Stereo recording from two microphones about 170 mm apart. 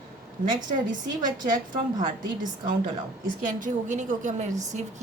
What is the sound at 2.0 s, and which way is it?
A woman's voice, 50° right (ahead or behind).